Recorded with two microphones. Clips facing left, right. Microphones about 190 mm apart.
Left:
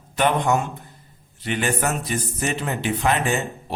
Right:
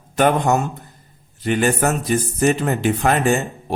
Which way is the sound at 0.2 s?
45° right (ahead or behind).